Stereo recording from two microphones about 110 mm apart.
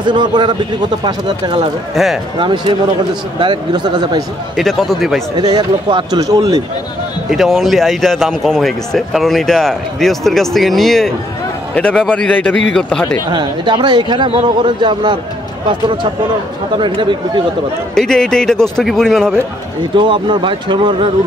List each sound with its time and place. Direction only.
0.0 s speech: 45° right (ahead or behind)
2.0 s speech: centre (ahead or behind)
2.3 s speech: 45° right (ahead or behind)
4.6 s speech: centre (ahead or behind)
5.4 s speech: 40° right (ahead or behind)
6.1 s speech: 35° right (ahead or behind)
7.2 s a man's voice: centre (ahead or behind)
13.3 s speech: 40° right (ahead or behind)
16.7 s speech: 50° right (ahead or behind)
17.9 s speech: 5° left (ahead or behind)
20.0 s speech: 45° right (ahead or behind)